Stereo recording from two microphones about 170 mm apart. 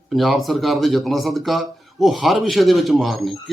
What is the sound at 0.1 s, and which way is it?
Speech, centre (ahead or behind).